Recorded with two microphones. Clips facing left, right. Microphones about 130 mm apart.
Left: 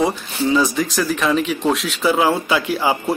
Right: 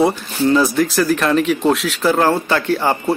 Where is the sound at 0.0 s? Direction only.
Centre (ahead or behind).